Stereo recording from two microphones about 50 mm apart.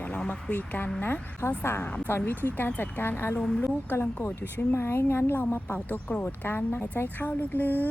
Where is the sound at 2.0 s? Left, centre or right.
Left.